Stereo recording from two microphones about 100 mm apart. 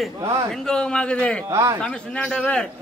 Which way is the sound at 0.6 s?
10° left (ahead or behind).